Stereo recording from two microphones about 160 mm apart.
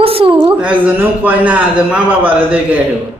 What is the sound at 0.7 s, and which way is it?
Speech, 10° right (ahead or behind).